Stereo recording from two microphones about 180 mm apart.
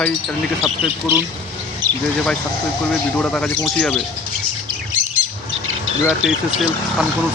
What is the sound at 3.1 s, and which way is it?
Speech, 5° left (ahead or behind).